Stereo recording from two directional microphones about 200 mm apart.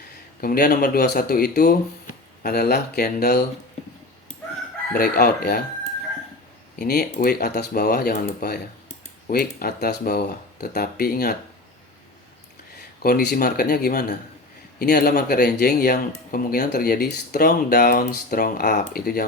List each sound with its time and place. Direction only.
0.4 s speech: 50° left (ahead or behind)
4.9 s speech: 50° left (ahead or behind)
6.7 s speech: 50° left (ahead or behind)
13.0 s speech: 50° left (ahead or behind)